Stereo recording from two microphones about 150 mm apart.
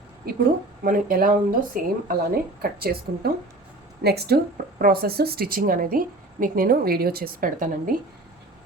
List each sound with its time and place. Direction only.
0.9 s a woman's voice: 70° right (ahead or behind)